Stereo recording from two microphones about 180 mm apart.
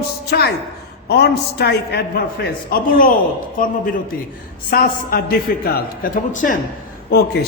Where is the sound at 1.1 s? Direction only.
65° left (ahead or behind); by 6.5 s 45° left (ahead or behind).